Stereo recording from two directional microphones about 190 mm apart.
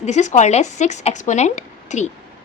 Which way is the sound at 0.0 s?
40° left (ahead or behind).